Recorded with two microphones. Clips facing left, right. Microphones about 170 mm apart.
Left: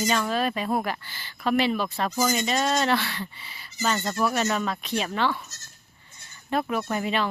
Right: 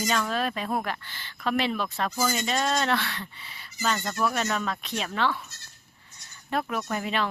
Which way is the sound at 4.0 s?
20° left (ahead or behind).